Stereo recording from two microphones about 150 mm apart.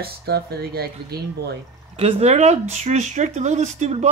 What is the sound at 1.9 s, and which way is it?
Speech, 45° right (ahead or behind).